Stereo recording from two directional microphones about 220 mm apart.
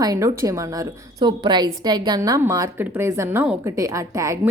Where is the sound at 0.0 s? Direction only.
15° right (ahead or behind).